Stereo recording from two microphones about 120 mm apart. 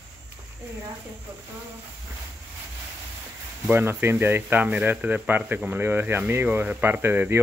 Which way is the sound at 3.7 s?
20° right (ahead or behind).